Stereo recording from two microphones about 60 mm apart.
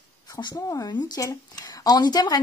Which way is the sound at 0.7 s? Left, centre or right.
Left.